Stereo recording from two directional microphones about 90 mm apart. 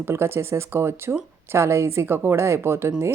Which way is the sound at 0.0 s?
30° right (ahead or behind).